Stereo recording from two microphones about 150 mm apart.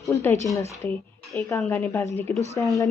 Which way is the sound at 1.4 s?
15° left (ahead or behind).